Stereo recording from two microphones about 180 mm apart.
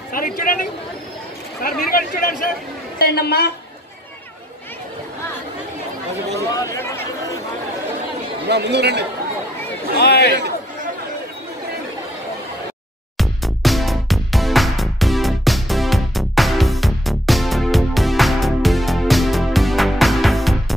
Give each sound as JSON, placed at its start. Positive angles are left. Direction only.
{"t": 0.1, "sound": "a woman's voice", "side_deg": 50}
{"t": 6.5, "sound": "a sound", "side_deg": 20}
{"t": 8.5, "sound": "speech", "side_deg": -70}
{"t": 9.9, "sound": "a woman's voice", "side_deg": 65}
{"t": 13.2, "sound": "music", "side_deg": 0}